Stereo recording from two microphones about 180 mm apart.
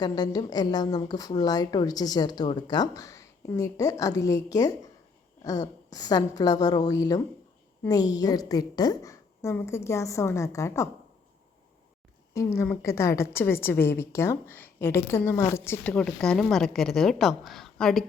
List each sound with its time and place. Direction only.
0.0 s a woman's voice: 20° left (ahead or behind)
12.3 s a woman's voice: 15° left (ahead or behind)